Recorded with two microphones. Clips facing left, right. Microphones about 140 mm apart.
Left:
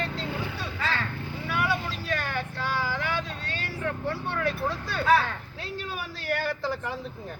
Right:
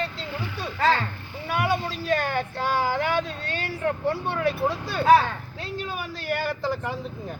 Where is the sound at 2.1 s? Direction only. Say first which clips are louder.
Right 7 dB; 45° right (ahead or behind).